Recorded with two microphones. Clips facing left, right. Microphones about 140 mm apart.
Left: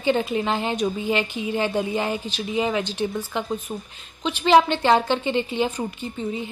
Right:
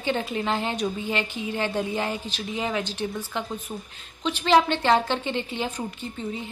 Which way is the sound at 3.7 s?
20° left (ahead or behind).